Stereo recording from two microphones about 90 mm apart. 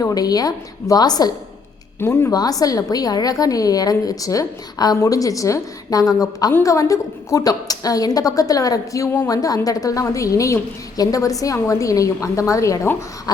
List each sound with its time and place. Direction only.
0.0 s a woman's voice: 45° left (ahead or behind)
2.0 s a woman's voice: 25° left (ahead or behind)
2.3 s a woman's voice: 45° left (ahead or behind)